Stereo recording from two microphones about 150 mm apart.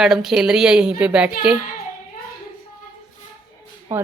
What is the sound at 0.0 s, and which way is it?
A woman's voice, centre (ahead or behind).